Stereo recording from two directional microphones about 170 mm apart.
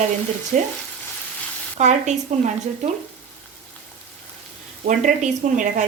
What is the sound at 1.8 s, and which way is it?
Speech, 45° right (ahead or behind).